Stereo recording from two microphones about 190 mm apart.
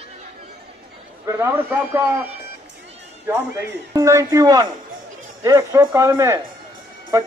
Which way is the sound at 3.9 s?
15° right (ahead or behind).